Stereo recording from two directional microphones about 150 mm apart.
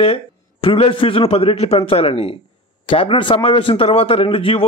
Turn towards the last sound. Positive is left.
turn(degrees=40)  # may be behind; listen again after turning